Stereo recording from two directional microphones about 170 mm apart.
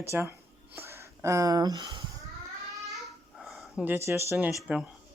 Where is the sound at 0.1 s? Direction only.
10° right (ahead or behind).